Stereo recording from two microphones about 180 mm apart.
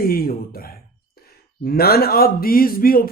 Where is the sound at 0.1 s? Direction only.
55° left (ahead or behind).